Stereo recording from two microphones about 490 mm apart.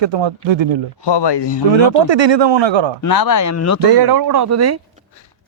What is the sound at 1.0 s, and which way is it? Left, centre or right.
Speech, left.